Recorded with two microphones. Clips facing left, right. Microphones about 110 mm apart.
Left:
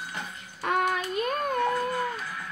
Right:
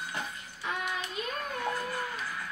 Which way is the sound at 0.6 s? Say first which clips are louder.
Left 9 dB; 55° left (ahead or behind).